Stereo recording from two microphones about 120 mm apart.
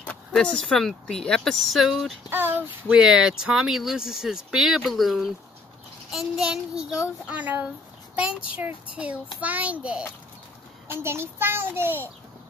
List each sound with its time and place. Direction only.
0.3 s speech: 5° left (ahead or behind)
2.2 s a child's voice: 15° right (ahead or behind)
2.9 s a child's voice: 5° right (ahead or behind)